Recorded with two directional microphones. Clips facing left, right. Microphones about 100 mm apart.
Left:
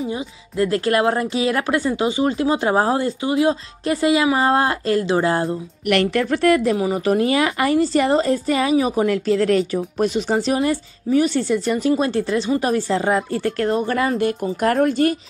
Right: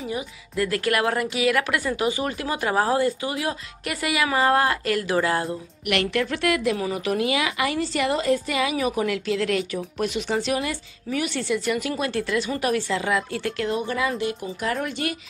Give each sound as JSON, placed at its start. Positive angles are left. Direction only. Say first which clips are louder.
{"t": 0.0, "sound": "a woman's voice", "louder": "left 4 dB", "side_deg": 25}
{"t": 13.8, "sound": "speech", "louder": "left 6 dB", "side_deg": 50}